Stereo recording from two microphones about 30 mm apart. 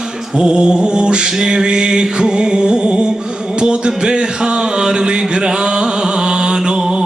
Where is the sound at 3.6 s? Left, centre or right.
Right.